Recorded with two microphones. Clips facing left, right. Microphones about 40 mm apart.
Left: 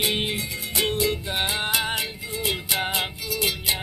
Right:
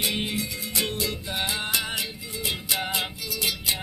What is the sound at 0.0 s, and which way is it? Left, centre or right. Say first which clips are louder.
Music: left 2 dB; left.